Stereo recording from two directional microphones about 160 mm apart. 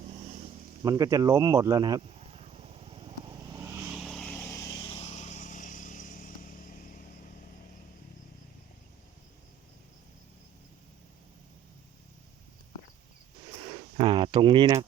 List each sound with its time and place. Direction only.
0.8 s speech: 20° right (ahead or behind)
2.0 s vehicle: 40° right (ahead or behind); by 3.8 s 20° right (ahead or behind)
3.8 s vehicle: centre (ahead or behind); by 7.0 s 60° left (ahead or behind)
13.9 s a sound: 35° right (ahead or behind)